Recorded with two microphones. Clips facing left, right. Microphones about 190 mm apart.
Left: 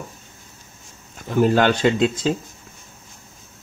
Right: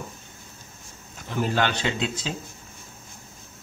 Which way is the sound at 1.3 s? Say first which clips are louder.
Left 8 dB; 45° left (ahead or behind).